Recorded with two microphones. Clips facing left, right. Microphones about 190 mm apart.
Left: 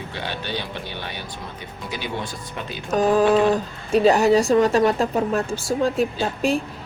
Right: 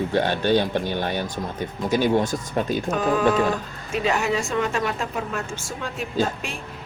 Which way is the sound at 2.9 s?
35° left (ahead or behind).